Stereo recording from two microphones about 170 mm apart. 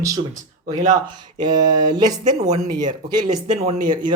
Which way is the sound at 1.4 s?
25° right (ahead or behind).